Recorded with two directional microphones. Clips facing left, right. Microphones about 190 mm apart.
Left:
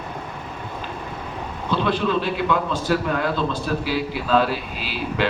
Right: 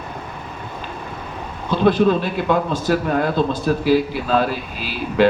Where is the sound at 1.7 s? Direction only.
45° right (ahead or behind).